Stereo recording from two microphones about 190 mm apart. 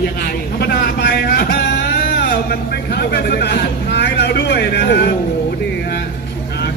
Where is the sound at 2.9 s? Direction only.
55° left (ahead or behind).